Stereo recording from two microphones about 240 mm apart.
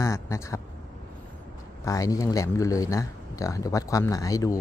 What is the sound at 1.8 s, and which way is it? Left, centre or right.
Speech, centre.